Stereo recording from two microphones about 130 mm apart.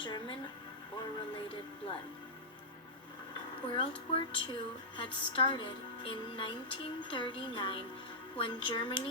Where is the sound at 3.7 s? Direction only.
45° left (ahead or behind).